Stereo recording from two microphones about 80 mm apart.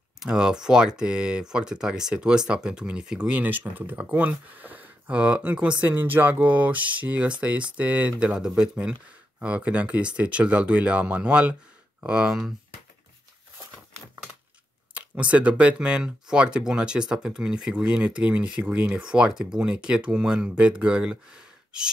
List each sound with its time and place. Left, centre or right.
0.2 s speech: centre
15.0 s speech: centre